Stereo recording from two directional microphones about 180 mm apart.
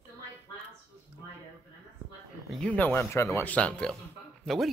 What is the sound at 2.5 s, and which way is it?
A man's voice, 5° left (ahead or behind).